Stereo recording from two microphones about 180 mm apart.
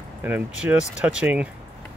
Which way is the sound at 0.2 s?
5° right (ahead or behind).